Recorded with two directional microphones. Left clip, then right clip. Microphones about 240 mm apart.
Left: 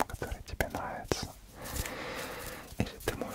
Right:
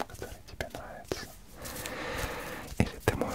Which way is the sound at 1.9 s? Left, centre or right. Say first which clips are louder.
Right 5 dB; centre.